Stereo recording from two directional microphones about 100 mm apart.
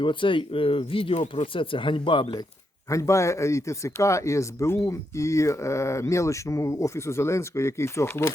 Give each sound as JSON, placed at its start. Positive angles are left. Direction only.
{"t": 0.0, "sound": "speech", "side_deg": 55}
{"t": 2.9, "sound": "speech", "side_deg": 30}